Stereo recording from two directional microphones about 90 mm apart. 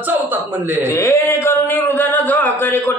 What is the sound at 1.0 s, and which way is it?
Music, 30° left (ahead or behind).